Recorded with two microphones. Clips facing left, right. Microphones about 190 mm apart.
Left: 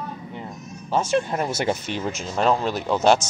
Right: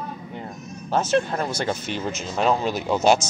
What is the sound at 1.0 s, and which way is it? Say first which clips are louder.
Speech: even; 10° left (ahead or behind).